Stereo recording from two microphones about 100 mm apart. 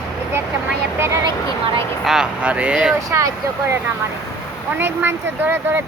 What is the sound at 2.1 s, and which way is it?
Speech, 10° right (ahead or behind).